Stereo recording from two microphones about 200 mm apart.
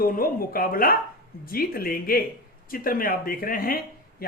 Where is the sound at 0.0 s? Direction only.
45° left (ahead or behind).